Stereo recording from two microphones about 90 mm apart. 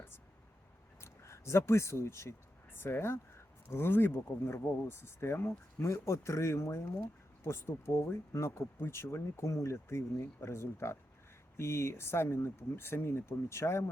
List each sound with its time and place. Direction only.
1.0 s speech: 30° left (ahead or behind)